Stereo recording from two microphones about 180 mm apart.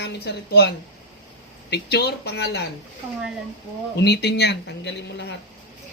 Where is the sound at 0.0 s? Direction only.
65° left (ahead or behind).